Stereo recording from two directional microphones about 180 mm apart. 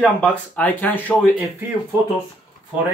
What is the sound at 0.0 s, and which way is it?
Speech, 5° left (ahead or behind).